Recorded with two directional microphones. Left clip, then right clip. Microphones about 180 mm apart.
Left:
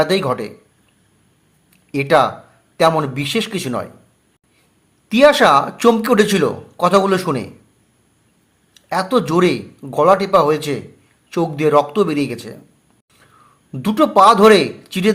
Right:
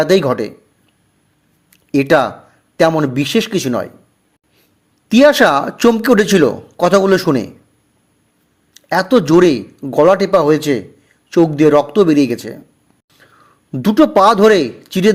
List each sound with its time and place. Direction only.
0.0 s a man's voice: 35° right (ahead or behind)
1.7 s a sound: 40° right (ahead or behind)
2.7 s a man's voice: 40° right (ahead or behind)
5.0 s a man's voice: 40° right (ahead or behind)
8.7 s a man's voice: 40° right (ahead or behind)